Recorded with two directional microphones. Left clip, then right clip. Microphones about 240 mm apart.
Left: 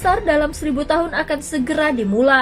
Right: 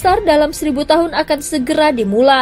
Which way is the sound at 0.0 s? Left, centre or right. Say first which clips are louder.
Right 5 dB; right.